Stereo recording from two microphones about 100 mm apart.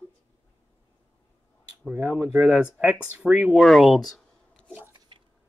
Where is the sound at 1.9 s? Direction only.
15° right (ahead or behind).